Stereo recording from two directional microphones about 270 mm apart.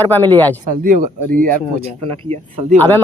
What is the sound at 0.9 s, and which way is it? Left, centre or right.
Speech, right.